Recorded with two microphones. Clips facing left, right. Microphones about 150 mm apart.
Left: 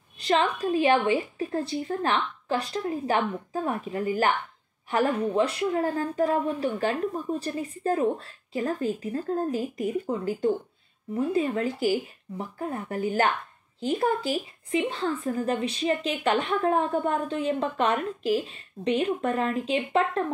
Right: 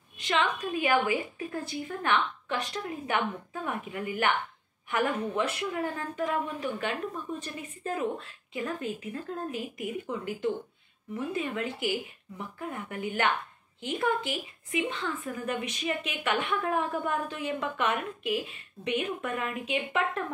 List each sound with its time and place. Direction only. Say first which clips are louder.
0.2 s a woman's voice: left 5 dB; 35° left (ahead or behind)